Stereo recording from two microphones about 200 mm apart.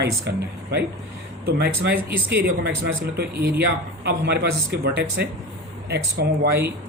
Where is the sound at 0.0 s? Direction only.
55° right (ahead or behind).